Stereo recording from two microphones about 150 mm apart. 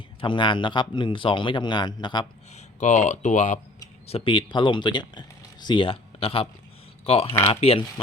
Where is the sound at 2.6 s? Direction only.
50° left (ahead or behind).